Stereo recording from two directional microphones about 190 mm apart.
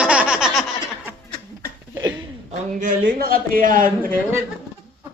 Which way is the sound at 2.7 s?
45° right (ahead or behind).